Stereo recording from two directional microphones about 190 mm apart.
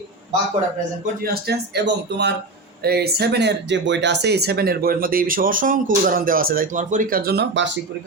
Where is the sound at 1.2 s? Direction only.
55° right (ahead or behind).